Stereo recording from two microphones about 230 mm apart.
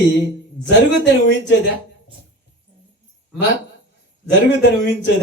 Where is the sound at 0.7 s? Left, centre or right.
Left.